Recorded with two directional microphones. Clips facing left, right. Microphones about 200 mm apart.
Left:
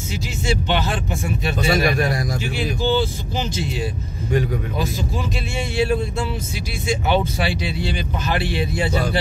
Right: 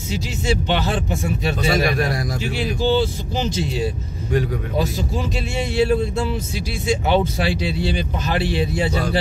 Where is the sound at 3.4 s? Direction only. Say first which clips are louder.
Right 3 dB; 40° right (ahead or behind).